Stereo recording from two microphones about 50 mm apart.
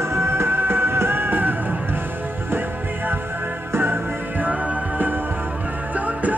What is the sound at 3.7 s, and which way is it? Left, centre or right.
Music, right.